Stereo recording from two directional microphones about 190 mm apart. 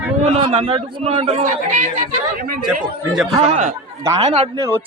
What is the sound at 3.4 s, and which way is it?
Speech, 35° right (ahead or behind).